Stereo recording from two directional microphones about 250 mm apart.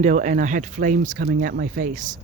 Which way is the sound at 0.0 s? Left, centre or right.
Right.